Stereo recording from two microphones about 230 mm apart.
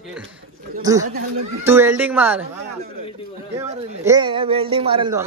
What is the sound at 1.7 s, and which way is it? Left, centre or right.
Speech, centre.